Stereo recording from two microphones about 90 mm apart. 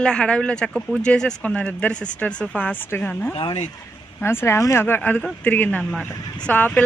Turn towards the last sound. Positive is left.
turn(degrees=15)  # may be behind; listen again after turning